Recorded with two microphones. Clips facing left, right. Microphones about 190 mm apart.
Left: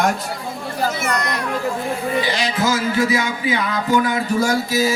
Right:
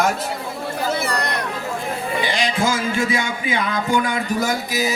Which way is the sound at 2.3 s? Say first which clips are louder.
Left 1 dB; 20° right (ahead or behind).